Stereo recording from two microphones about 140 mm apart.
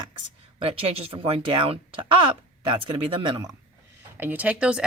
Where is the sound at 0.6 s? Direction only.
45° right (ahead or behind).